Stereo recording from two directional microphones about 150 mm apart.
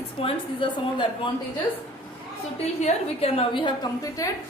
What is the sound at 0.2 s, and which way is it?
A woman's voice, 35° left (ahead or behind).